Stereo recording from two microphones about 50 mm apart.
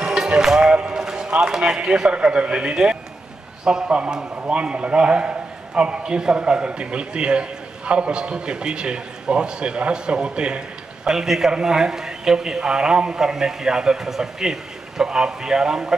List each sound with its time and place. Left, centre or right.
0.0 s run: centre
1.8 s a man's voice: centre
11.1 s a man's voice: centre